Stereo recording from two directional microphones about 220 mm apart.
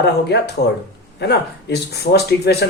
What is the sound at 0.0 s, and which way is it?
Speech, 50° left (ahead or behind).